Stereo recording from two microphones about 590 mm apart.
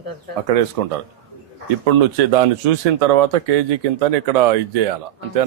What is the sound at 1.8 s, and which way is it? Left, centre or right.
A man's voice, right.